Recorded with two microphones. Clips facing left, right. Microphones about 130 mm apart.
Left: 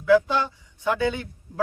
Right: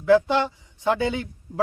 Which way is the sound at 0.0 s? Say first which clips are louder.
Right 1 dB; 25° right (ahead or behind).